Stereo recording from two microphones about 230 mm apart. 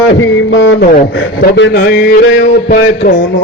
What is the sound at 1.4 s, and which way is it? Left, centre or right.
Speech, left.